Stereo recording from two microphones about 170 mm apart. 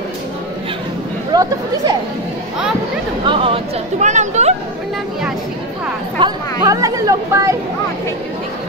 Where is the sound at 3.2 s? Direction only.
30° right (ahead or behind).